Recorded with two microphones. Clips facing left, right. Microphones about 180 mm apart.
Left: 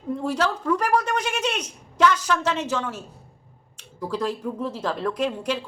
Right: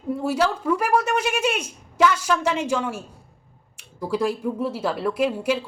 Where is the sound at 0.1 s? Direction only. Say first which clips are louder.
Right 2 dB; 5° right (ahead or behind).